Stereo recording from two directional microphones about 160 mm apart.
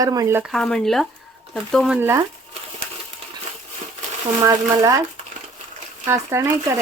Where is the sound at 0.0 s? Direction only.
25° right (ahead or behind).